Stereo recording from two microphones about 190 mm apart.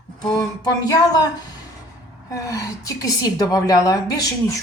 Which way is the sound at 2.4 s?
15° left (ahead or behind).